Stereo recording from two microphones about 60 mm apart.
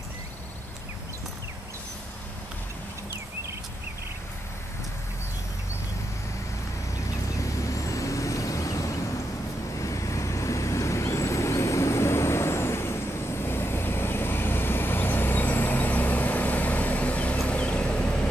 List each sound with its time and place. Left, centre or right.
7.3 s vehicle: left; by 18.2 s centre